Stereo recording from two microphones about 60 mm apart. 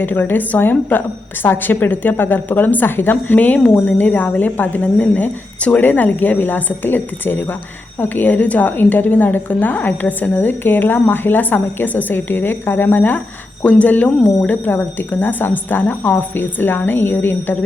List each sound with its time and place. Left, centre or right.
0.0 s a woman's voice: left